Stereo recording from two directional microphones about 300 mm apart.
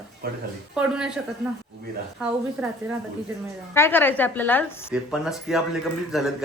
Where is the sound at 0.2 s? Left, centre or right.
Right.